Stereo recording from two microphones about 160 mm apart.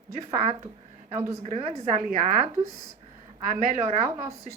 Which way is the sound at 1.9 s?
55° right (ahead or behind).